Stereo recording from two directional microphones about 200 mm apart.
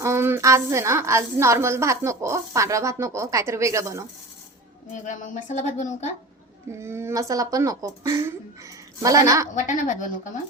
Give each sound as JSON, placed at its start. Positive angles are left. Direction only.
{"t": 0.0, "sound": "a woman's voice", "side_deg": -10}
{"t": 4.9, "sound": "speech", "side_deg": 40}
{"t": 6.7, "sound": "a woman's voice", "side_deg": -15}
{"t": 9.6, "sound": "speech", "side_deg": 40}